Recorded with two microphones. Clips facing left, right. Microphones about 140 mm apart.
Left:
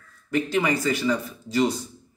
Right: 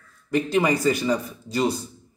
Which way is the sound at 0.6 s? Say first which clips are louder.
Right 4 dB; 35° right (ahead or behind).